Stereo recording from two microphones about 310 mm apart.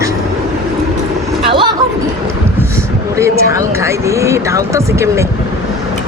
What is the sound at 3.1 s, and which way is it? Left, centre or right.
Speech, centre.